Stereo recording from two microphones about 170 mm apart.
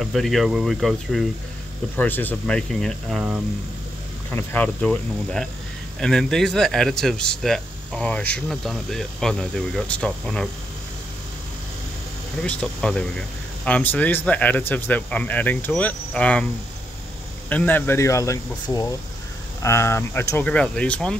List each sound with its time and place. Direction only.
0.0 s speech: centre (ahead or behind)
2.0 s speech: 10° left (ahead or behind)
4.3 s speech: 10° left (ahead or behind)
12.4 s speech: 5° left (ahead or behind)
17.5 s speech: 10° left (ahead or behind)